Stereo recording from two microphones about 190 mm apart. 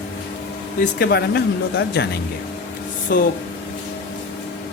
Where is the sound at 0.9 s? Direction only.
60° left (ahead or behind).